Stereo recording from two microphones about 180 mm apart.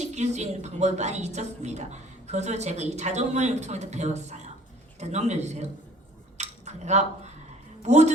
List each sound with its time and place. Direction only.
0.0 s a woman's voice: 40° right (ahead or behind)
6.3 s cutlery: 40° right (ahead or behind)
7.8 s a woman's voice: 40° right (ahead or behind)